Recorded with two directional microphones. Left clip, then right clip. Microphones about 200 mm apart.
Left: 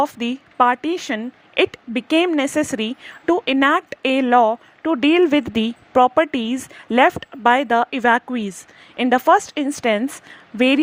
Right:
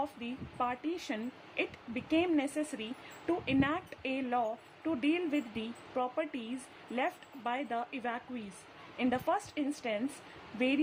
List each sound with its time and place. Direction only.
0.0 s a woman's voice: 45° left (ahead or behind)